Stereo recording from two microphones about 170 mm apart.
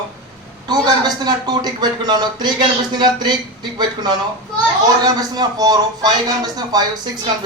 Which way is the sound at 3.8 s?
25° right (ahead or behind).